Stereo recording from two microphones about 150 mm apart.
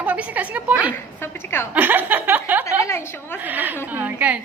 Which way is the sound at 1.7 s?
10° right (ahead or behind).